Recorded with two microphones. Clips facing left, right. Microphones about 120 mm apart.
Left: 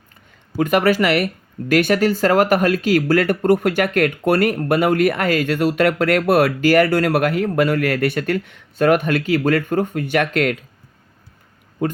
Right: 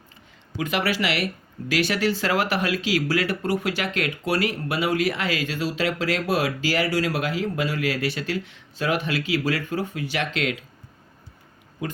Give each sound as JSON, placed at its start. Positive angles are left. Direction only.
{"t": 0.5, "sound": "speech", "side_deg": 50}
{"t": 11.8, "sound": "speech", "side_deg": 50}